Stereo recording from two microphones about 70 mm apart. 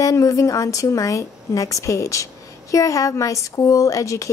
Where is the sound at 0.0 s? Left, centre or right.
Left.